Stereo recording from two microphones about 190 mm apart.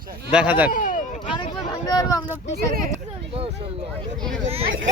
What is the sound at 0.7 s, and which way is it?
Speech, 45° left (ahead or behind).